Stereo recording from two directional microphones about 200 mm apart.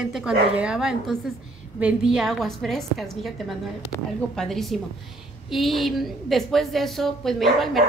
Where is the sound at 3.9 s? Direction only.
15° left (ahead or behind).